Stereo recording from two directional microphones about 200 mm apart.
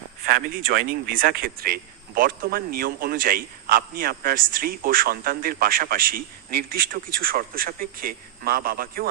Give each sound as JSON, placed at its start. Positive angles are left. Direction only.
{"t": 0.3, "sound": "speech", "side_deg": -45}